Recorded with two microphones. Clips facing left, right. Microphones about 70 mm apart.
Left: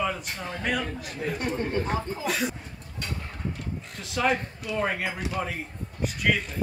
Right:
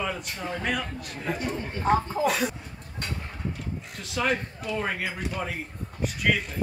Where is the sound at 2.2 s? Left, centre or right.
Centre.